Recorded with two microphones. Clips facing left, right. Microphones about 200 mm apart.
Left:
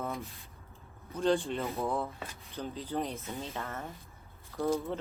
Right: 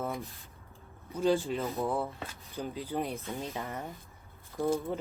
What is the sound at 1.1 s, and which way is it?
Speech, 5° right (ahead or behind).